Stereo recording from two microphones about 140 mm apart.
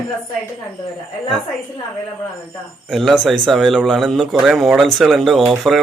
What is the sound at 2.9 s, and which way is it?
Speech, centre (ahead or behind).